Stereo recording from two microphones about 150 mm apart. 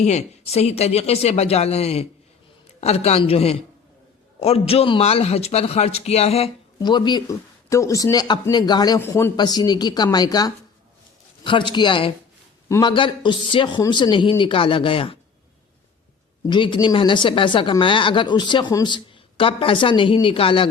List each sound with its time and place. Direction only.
0.0 s a man's voice: 45° left (ahead or behind)
6.7 s speech: 30° left (ahead or behind)
9.0 s speech: 15° left (ahead or behind)
9.3 s speech: 30° left (ahead or behind)
11.7 s speech: 30° left (ahead or behind)
16.5 s speech: 30° left (ahead or behind)